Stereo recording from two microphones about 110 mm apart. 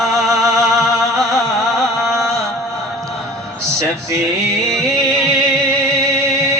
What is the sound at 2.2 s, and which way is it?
Chant, centre (ahead or behind).